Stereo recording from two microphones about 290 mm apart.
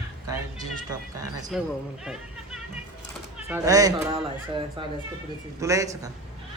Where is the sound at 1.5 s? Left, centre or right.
Centre.